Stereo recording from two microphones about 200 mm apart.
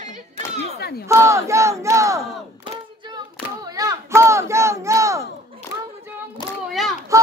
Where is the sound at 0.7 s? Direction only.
50° left (ahead or behind).